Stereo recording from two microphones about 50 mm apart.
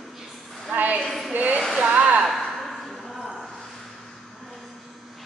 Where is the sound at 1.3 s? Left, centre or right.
Right.